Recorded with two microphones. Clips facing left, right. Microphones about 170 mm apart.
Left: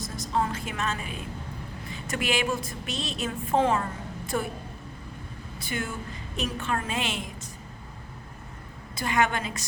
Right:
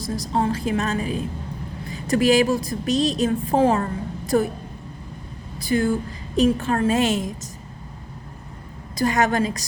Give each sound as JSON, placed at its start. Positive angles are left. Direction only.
{"t": 0.0, "sound": "a woman's voice", "side_deg": -35}
{"t": 5.5, "sound": "a woman's voice", "side_deg": -35}
{"t": 9.0, "sound": "a woman's voice", "side_deg": -40}